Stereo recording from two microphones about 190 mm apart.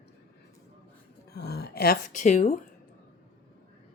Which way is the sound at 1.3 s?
60° left (ahead or behind).